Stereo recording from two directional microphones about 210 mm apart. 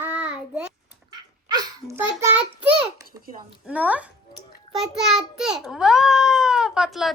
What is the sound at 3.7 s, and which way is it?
A child's voice, 5° right (ahead or behind).